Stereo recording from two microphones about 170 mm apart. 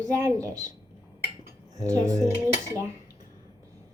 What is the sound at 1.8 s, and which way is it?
Child singing, 20° right (ahead or behind).